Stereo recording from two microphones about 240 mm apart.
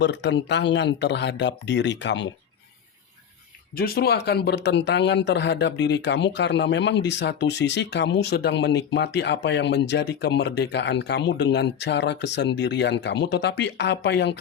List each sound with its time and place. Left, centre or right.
0.0 s speech: left
3.8 s speech: left